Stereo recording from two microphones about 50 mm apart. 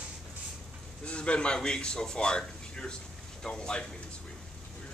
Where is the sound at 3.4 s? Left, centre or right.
Centre.